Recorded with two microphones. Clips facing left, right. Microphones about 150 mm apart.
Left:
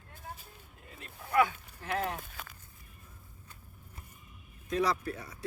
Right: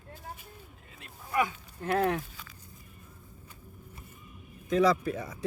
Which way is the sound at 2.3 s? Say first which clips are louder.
Left 3 dB; 60° left (ahead or behind).